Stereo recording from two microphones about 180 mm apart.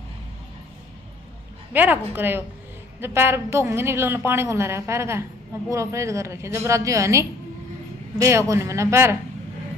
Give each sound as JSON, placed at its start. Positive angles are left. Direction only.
{"t": 1.7, "sound": "a woman's voice", "side_deg": -10}